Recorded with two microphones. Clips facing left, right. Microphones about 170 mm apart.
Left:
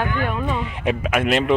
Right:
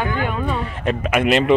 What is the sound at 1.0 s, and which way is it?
Speech, centre (ahead or behind).